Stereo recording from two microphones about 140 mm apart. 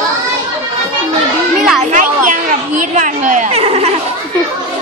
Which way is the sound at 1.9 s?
65° right (ahead or behind).